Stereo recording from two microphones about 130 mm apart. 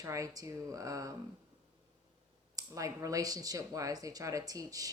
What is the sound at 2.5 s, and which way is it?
Speech, 25° right (ahead or behind).